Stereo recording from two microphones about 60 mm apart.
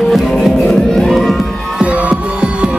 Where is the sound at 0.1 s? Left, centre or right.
Centre.